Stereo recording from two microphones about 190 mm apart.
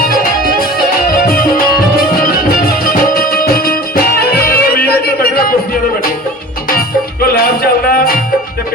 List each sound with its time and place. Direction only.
0.0 s music: 50° left (ahead or behind)
6.7 s music: 50° left (ahead or behind)